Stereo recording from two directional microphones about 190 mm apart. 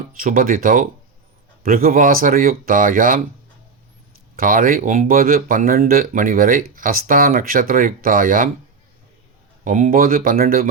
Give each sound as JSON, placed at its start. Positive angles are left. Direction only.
{"t": 0.2, "sound": "speech", "side_deg": -45}
{"t": 4.4, "sound": "speech", "side_deg": -45}
{"t": 9.6, "sound": "speech", "side_deg": -40}